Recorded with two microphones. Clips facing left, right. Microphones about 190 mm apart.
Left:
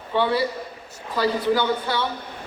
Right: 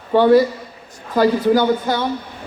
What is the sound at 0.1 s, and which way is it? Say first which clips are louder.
A man's voice: right 10 dB; 45° right (ahead or behind).